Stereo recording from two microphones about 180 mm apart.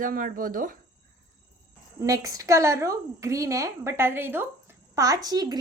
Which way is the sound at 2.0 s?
20° right (ahead or behind).